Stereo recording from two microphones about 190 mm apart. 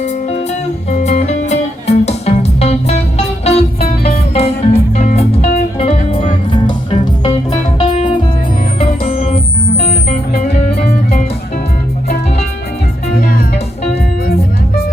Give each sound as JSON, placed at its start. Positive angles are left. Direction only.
{"t": 0.0, "sound": "music", "side_deg": 40}
{"t": 7.9, "sound": "music", "side_deg": 40}
{"t": 8.8, "sound": "music", "side_deg": 30}
{"t": 13.1, "sound": "music", "side_deg": 50}